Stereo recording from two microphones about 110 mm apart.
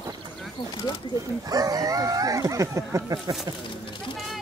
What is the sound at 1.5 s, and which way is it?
Speech, 35° right (ahead or behind).